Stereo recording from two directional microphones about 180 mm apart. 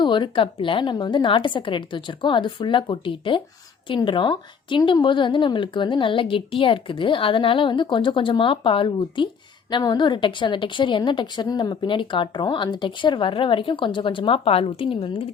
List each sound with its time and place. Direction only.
0.0 s a woman's voice: 25° left (ahead or behind)